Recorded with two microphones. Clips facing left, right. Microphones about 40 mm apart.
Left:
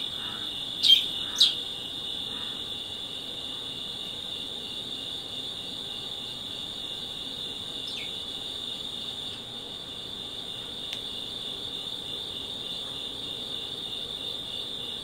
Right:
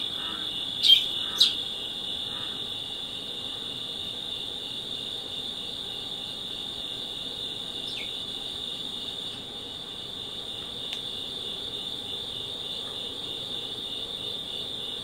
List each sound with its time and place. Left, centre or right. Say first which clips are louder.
0.8 s bird: right 1 dB; right